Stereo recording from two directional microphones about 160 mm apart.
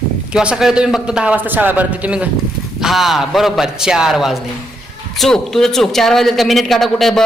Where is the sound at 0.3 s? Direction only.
5° right (ahead or behind).